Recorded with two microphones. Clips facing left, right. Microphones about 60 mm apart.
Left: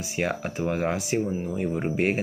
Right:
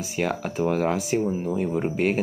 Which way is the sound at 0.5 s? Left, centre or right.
Centre.